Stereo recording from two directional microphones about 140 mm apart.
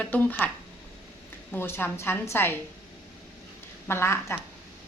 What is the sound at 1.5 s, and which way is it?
A woman's voice, 15° left (ahead or behind).